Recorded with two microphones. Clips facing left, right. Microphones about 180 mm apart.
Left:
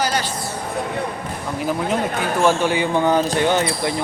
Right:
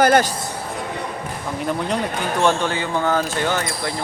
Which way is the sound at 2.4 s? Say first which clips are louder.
Left 2 dB; 10° left (ahead or behind).